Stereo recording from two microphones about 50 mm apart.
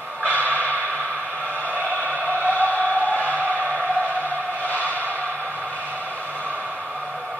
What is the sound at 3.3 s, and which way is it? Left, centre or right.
Music, right.